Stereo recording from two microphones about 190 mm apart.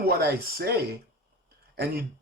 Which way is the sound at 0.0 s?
55° right (ahead or behind).